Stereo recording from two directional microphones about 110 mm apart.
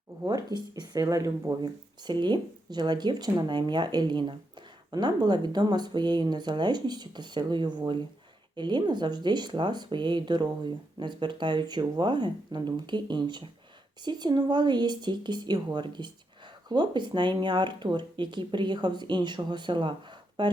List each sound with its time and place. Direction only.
0.3 s speech: 40° right (ahead or behind)